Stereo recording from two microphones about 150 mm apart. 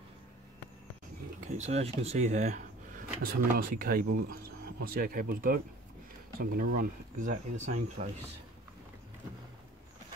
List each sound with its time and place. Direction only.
1.5 s speech: 45° right (ahead or behind)
3.2 s speech: 75° right (ahead or behind); by 8.1 s 55° right (ahead or behind)